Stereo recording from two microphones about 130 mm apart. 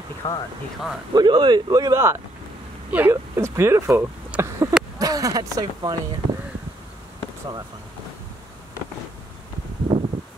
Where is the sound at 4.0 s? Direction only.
15° right (ahead or behind).